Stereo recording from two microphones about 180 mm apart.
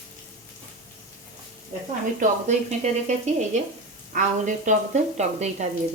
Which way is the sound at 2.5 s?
40° right (ahead or behind).